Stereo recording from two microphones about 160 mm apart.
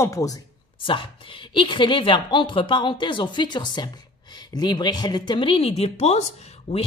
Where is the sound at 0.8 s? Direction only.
30° left (ahead or behind).